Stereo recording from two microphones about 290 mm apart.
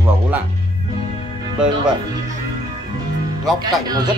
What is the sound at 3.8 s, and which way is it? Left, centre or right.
Speech, centre.